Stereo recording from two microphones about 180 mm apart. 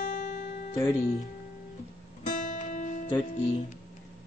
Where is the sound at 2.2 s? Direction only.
45° left (ahead or behind).